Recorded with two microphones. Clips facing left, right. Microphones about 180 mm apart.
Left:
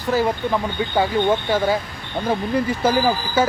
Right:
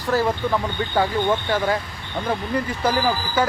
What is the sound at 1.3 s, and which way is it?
Speech, 25° left (ahead or behind).